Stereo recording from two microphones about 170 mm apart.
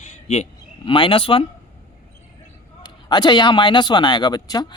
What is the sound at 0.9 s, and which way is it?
Speech, 30° left (ahead or behind).